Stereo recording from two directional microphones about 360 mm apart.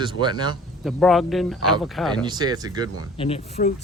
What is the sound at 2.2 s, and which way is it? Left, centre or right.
Speech, centre.